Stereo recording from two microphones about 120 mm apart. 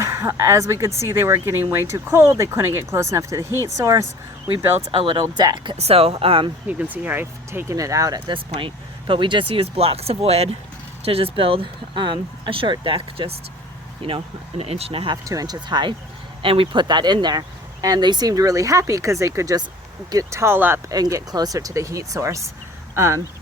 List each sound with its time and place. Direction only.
0.0 s speech: 25° right (ahead or behind)
4.9 s speech: 45° right (ahead or behind)
5.7 s speech: 55° right (ahead or behind)
6.7 s speech: 15° right (ahead or behind)
8.3 s speech: 45° right (ahead or behind)
15.1 s speech: 30° right (ahead or behind)
20.9 s speech: 30° right (ahead or behind)